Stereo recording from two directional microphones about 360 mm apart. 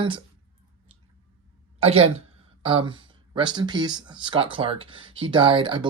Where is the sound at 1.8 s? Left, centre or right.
Centre.